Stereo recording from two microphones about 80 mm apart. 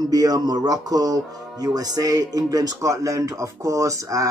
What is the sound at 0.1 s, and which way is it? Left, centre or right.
Speech, right.